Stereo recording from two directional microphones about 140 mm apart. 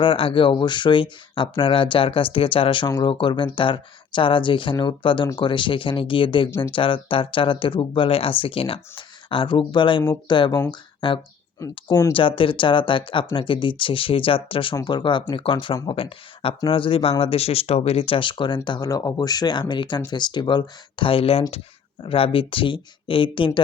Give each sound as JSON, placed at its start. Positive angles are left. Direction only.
{"t": 0.0, "sound": "speech", "side_deg": 40}
{"t": 11.9, "sound": "speech", "side_deg": 20}
{"t": 12.1, "sound": "speech", "side_deg": 40}